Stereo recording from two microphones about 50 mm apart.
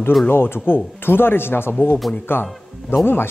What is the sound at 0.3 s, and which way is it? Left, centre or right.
Speech, left.